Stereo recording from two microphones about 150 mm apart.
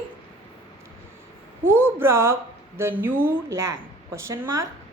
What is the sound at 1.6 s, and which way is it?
A woman's voice, 15° right (ahead or behind).